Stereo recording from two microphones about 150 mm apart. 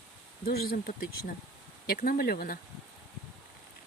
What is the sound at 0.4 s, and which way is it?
Speech, 90° left.